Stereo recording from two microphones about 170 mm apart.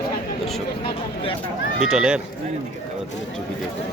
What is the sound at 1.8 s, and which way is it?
Speech, 5° right (ahead or behind).